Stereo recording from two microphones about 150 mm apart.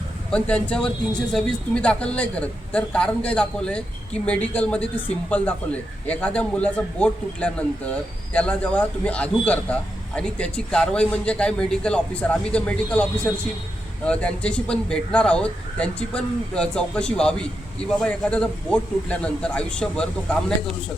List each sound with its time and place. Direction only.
0.3 s a man's voice: 5° left (ahead or behind)